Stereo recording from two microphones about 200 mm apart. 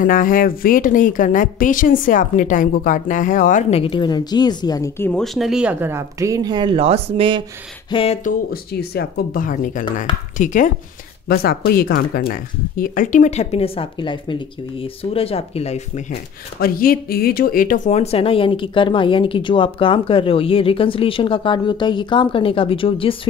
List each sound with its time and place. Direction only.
0.0 s speech: 45° left (ahead or behind)
3.8 s speech: 25° left (ahead or behind)
5.2 s speech: centre (ahead or behind); by 7.4 s 25° right (ahead or behind)
7.9 s speech: 30° left (ahead or behind)
8.9 s speech: 45° left (ahead or behind)
11.2 s speech: 50° left (ahead or behind); by 16.2 s 30° left (ahead or behind)
16.5 s speech: 45° left (ahead or behind); by 23.1 s 25° left (ahead or behind)